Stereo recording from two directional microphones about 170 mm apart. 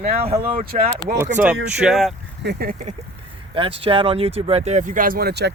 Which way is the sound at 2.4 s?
70° right (ahead or behind).